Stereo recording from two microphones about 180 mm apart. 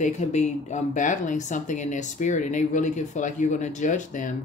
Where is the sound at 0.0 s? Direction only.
40° left (ahead or behind).